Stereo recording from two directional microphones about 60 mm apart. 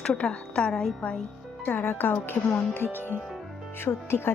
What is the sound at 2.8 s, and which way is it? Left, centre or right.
Speech, right.